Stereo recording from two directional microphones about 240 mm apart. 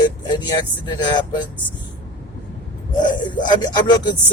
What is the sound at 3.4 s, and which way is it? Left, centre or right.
Speech, centre.